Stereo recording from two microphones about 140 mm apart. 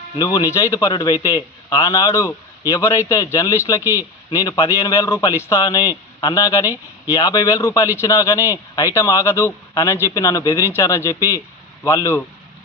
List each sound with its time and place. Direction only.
0.2 s a man's voice: 25° left (ahead or behind)